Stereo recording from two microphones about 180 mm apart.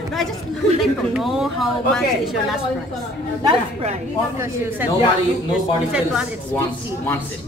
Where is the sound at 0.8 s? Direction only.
Centre (ahead or behind).